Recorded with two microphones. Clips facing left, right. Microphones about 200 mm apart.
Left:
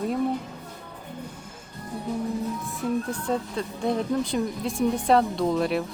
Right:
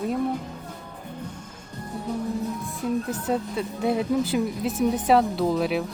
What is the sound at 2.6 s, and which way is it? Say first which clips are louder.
Speech: right 1 dB; 5° right (ahead or behind).